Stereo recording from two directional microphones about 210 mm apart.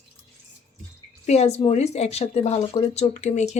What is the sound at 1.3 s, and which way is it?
A woman's voice, 30° left (ahead or behind).